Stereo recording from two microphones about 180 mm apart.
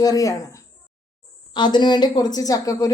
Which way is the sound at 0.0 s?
20° left (ahead or behind).